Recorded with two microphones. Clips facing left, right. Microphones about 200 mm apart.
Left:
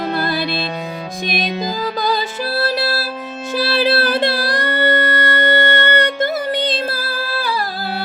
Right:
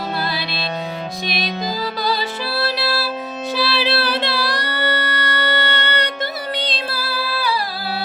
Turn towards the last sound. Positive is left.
turn(degrees=50)  # may be behind; listen again after turning